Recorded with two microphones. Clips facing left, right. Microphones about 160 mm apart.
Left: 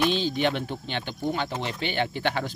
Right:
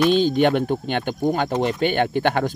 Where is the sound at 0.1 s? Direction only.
50° right (ahead or behind).